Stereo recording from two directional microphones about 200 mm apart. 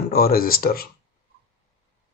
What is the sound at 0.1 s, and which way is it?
Speech, 50° left (ahead or behind).